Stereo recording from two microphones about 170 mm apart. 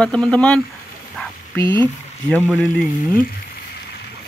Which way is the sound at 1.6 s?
30° right (ahead or behind).